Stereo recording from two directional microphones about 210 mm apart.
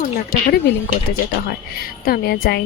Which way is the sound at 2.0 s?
45° left (ahead or behind).